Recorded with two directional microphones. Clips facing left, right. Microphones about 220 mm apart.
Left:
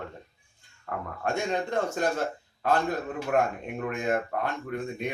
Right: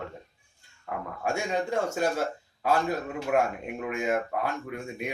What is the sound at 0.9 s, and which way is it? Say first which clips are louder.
Speech: even; 5° right (ahead or behind).